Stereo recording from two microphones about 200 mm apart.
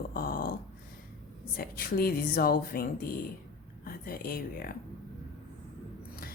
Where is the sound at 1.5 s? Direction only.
50° left (ahead or behind).